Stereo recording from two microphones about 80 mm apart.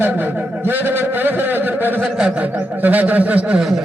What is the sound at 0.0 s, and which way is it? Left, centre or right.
Speech, right.